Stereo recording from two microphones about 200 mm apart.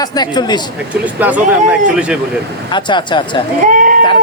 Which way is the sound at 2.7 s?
25° left (ahead or behind).